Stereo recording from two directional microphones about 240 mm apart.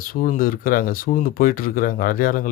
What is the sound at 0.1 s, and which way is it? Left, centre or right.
Speech, left.